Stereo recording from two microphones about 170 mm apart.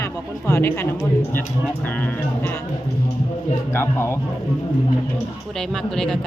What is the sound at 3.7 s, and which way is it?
Speech, 15° left (ahead or behind).